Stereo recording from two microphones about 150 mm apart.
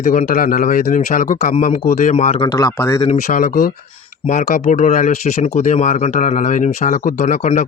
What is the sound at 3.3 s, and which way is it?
Speech, 65° left (ahead or behind).